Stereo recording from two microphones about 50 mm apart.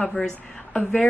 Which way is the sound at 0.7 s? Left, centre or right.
Left.